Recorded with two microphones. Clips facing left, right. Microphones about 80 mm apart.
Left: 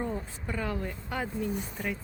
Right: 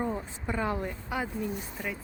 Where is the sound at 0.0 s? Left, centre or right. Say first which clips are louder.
Right 2 dB; centre.